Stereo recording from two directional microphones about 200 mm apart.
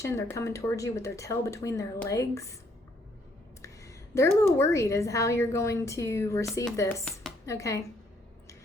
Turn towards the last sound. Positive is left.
turn(degrees=15)  # may be behind; listen again after turning